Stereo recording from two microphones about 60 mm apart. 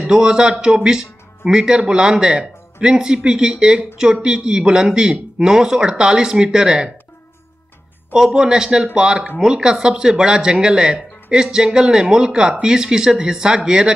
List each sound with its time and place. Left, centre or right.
0.0 s speech: centre
8.1 s speech: centre